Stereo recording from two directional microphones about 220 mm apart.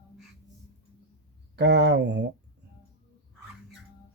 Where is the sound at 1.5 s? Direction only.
50° right (ahead or behind).